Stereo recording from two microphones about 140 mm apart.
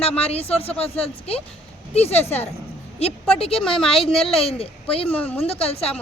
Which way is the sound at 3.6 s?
5° left (ahead or behind).